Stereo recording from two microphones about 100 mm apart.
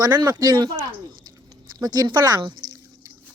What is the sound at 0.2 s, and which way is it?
Speech, 40° right (ahead or behind).